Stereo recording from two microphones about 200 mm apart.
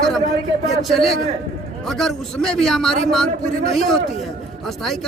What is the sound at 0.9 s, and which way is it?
A man's voice, centre (ahead or behind).